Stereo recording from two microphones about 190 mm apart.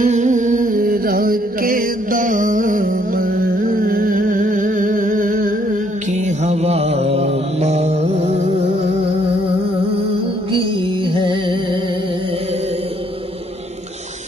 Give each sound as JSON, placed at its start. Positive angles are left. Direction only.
{"t": 0.0, "sound": "music", "side_deg": -40}
{"t": 11.1, "sound": "music", "side_deg": -25}